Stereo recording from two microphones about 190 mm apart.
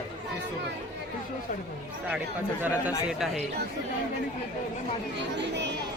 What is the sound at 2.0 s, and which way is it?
Speech, 5° right (ahead or behind).